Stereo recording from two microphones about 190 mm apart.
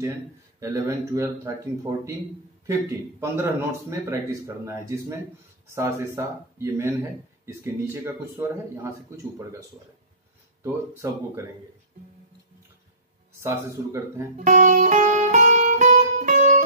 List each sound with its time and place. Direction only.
0.6 s a man's voice: 15° right (ahead or behind)
10.6 s a man's voice: 15° right (ahead or behind)
13.4 s a man's voice: 15° right (ahead or behind)
14.3 s music: 40° right (ahead or behind)